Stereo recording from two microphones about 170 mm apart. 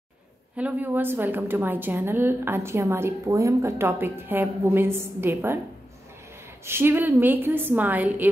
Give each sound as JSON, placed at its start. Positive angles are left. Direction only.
{"t": 0.6, "sound": "a woman's voice", "side_deg": -10}
{"t": 6.6, "sound": "a woman's voice", "side_deg": -15}